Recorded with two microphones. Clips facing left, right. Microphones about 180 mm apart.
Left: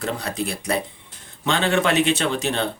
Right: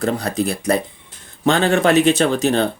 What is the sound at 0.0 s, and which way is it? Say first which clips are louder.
A man's voice: right 6 dB; 40° right (ahead or behind).